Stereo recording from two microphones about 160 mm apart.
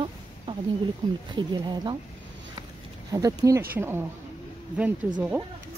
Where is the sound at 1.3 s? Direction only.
30° right (ahead or behind).